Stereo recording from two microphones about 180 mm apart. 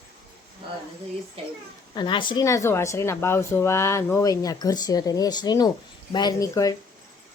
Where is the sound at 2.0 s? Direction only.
25° left (ahead or behind).